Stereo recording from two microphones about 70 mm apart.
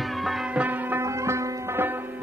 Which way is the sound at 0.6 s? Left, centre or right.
Right.